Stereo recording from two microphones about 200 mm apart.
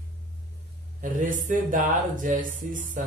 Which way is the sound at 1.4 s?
40° right (ahead or behind).